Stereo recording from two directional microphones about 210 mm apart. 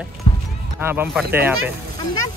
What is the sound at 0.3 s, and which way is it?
Music, 25° left (ahead or behind).